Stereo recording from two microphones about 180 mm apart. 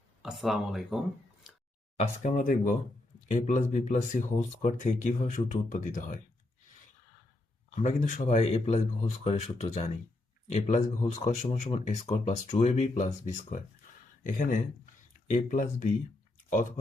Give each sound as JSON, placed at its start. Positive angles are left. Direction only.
{"t": 0.2, "sound": "speech", "side_deg": 0}
{"t": 2.0, "sound": "speech", "side_deg": 45}
{"t": 7.8, "sound": "speech", "side_deg": 45}